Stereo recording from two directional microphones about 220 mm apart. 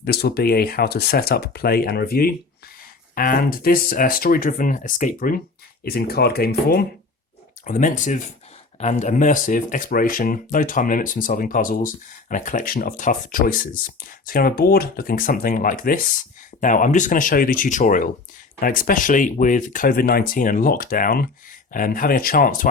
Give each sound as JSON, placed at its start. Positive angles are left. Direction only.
{"t": 0.0, "sound": "speech", "side_deg": 45}